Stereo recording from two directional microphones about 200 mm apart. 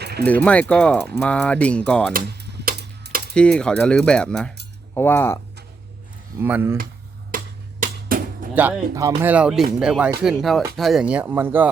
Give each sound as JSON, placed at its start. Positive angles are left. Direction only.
{"t": 0.0, "sound": "a sound", "side_deg": -55}
{"t": 0.7, "sound": "speech", "side_deg": 5}
{"t": 2.1, "sound": "a sound", "side_deg": -55}
{"t": 3.3, "sound": "speech", "side_deg": 5}
{"t": 6.4, "sound": "speech", "side_deg": -10}
{"t": 7.3, "sound": "finger snapping", "side_deg": -45}
{"t": 8.5, "sound": "speech", "side_deg": -10}